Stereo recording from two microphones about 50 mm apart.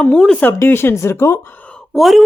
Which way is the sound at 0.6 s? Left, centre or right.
Left.